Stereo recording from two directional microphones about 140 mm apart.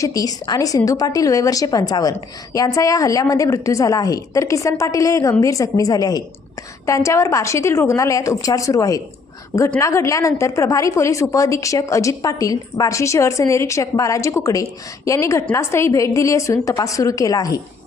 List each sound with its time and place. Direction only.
0.0 s a woman's voice: 25° left (ahead or behind)